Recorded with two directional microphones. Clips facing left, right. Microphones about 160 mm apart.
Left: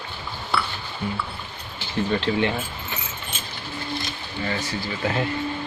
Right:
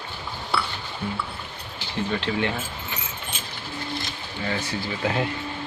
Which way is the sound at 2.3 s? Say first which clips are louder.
Left 3 dB; 30° left (ahead or behind).